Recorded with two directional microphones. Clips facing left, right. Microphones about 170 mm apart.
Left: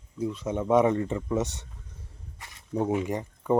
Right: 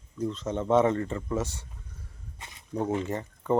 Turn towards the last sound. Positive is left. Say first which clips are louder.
# left 1 dB
turn(degrees=15)  # may be behind; listen again after turning